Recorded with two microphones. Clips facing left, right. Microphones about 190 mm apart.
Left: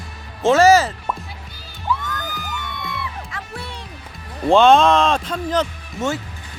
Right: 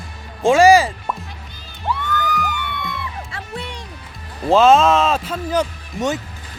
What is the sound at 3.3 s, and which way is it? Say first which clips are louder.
Music: right 2 dB; 20° right (ahead or behind).